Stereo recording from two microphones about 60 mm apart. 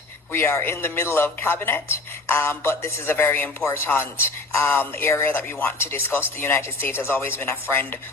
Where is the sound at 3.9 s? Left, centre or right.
Left.